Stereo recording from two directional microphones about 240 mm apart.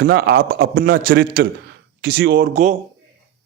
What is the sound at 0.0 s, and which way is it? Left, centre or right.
A man's voice, right.